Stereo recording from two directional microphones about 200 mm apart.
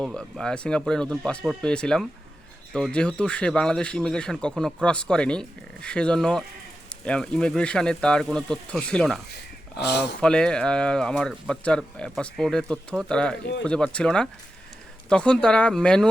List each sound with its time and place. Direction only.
0.0 s speech: 5° left (ahead or behind)
9.8 s speech: 55° left (ahead or behind)
10.2 s speech: 5° left (ahead or behind)